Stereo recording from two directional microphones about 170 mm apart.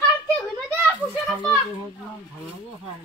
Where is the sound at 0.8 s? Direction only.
10° left (ahead or behind).